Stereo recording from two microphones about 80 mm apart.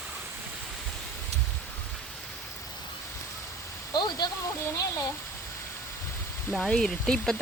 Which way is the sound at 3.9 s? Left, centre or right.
Left.